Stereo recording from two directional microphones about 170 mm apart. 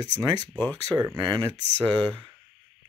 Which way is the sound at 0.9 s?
20° right (ahead or behind).